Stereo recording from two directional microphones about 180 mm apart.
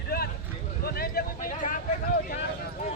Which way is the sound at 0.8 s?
60° left (ahead or behind).